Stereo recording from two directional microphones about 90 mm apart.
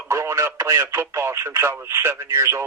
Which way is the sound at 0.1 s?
30° right (ahead or behind).